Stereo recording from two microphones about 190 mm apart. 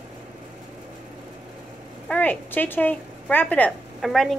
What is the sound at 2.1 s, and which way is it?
A woman's voice, 10° left (ahead or behind).